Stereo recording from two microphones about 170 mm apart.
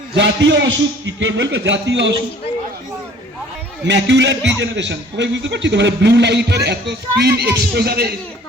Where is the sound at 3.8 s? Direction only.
90° right.